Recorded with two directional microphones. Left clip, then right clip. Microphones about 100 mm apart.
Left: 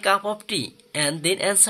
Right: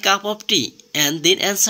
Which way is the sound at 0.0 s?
5° right (ahead or behind).